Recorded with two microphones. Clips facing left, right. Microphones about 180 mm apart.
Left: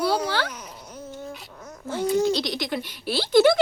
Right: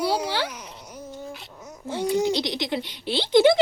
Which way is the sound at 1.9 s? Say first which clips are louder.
Left 1 dB; 15° right (ahead or behind).